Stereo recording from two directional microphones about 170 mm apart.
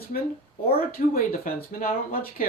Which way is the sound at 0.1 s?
55° left (ahead or behind).